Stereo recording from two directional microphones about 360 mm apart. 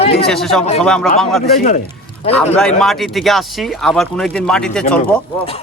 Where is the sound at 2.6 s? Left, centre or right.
Centre.